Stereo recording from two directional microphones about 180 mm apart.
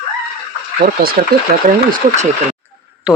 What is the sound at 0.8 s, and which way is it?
Speech, 45° right (ahead or behind).